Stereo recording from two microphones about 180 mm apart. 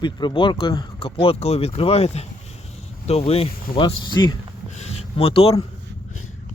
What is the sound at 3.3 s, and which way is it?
Speech, 30° left (ahead or behind).